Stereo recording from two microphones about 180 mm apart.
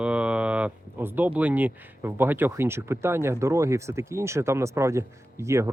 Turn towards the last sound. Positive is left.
turn(degrees=-15)  # may be behind; listen again after turning